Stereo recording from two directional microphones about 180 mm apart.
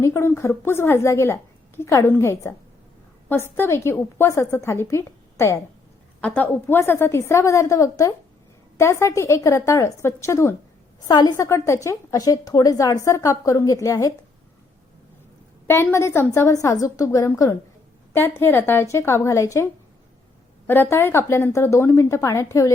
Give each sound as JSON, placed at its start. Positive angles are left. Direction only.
{"t": 0.0, "sound": "a woman's voice", "side_deg": 15}
{"t": 15.6, "sound": "a woman's voice", "side_deg": 15}
{"t": 20.9, "sound": "a woman's voice", "side_deg": 15}